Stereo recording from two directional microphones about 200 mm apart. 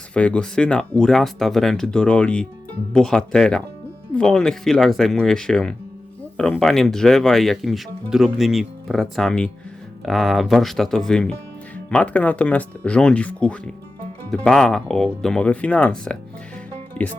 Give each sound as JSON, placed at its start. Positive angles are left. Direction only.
{"t": 0.1, "sound": "speech", "side_deg": 5}